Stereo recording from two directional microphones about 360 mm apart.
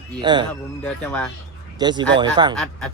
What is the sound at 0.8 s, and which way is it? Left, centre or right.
Speech, centre.